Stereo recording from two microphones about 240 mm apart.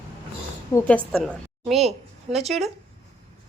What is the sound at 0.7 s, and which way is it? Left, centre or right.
Speech, centre.